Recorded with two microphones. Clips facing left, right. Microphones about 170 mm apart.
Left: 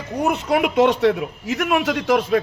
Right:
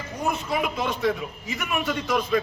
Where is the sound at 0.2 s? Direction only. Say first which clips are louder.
Left 7 dB; 70° left (ahead or behind).